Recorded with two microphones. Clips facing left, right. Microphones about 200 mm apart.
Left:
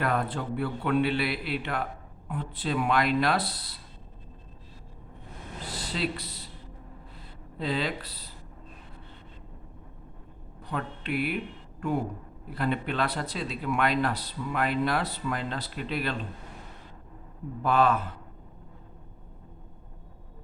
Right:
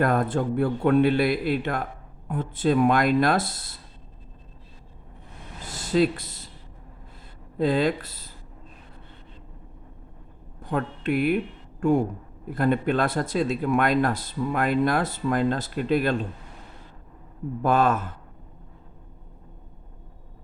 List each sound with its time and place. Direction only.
0.0 s speech: 45° right (ahead or behind)
5.6 s a sound: 45° right (ahead or behind)
7.6 s speech: 45° right (ahead or behind)
10.6 s speech: 45° right (ahead or behind)
12.5 s speech: 45° right (ahead or behind)
17.6 s speech: 45° right (ahead or behind)